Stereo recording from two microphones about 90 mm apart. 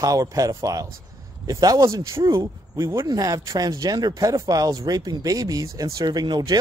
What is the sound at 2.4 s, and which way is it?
Speech, 35° right (ahead or behind).